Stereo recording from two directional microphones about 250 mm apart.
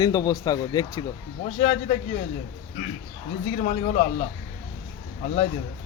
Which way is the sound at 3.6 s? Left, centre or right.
Left.